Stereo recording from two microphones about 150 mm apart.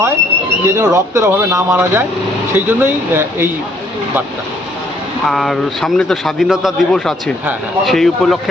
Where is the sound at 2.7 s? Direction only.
15° right (ahead or behind).